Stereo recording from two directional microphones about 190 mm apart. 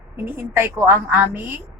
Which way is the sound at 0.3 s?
10° right (ahead or behind).